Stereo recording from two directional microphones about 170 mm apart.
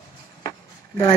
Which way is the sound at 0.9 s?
25° left (ahead or behind).